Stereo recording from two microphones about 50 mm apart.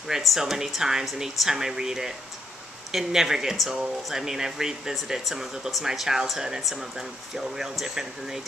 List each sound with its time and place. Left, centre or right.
0.2 s speech: centre